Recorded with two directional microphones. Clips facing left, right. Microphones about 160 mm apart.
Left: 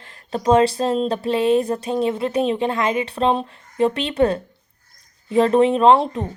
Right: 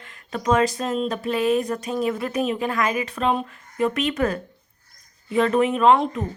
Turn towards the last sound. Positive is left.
turn(degrees=30)  # may be behind; listen again after turning